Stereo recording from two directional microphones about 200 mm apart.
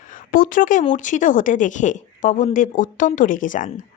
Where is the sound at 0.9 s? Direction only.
40° left (ahead or behind).